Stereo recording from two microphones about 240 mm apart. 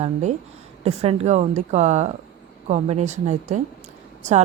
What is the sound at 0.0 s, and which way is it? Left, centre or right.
A woman's voice, right.